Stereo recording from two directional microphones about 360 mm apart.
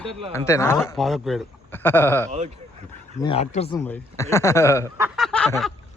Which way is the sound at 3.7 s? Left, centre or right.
Centre.